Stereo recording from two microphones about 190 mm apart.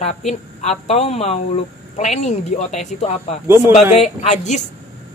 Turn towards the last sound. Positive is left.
turn(degrees=40)  # may be behind; listen again after turning